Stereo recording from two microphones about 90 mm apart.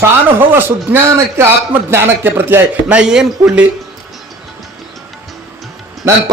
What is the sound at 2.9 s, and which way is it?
Speech, 10° right (ahead or behind).